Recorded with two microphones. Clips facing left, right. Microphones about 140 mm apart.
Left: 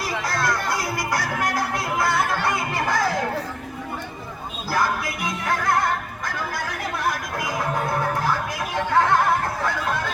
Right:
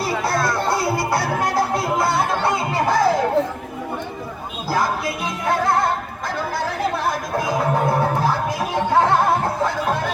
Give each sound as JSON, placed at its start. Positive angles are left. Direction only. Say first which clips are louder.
{"t": 0.1, "sound": "speech", "louder": "right 6 dB", "side_deg": -5}
{"t": 0.4, "sound": "music", "louder": "right 4 dB", "side_deg": -25}
{"t": 4.7, "sound": "music", "louder": "right 2 dB", "side_deg": -20}
{"t": 6.9, "sound": "music", "louder": "right 4 dB", "side_deg": -30}